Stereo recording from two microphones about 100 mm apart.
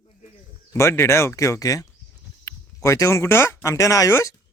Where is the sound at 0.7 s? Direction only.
25° left (ahead or behind).